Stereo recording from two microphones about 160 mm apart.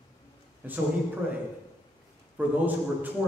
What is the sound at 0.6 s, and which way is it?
Speech, 10° right (ahead or behind).